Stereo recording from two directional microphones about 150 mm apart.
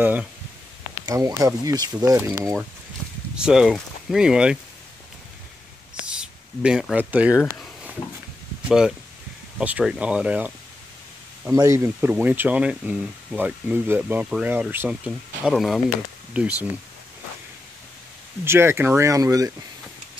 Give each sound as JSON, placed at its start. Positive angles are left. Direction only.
{"t": 0.0, "sound": "speech", "side_deg": -10}
{"t": 1.0, "sound": "speech", "side_deg": -20}
{"t": 3.3, "sound": "speech", "side_deg": -5}
{"t": 6.0, "sound": "speech", "side_deg": -5}
{"t": 8.6, "sound": "speech", "side_deg": -5}
{"t": 11.5, "sound": "speech", "side_deg": -20}
{"t": 18.4, "sound": "speech", "side_deg": -15}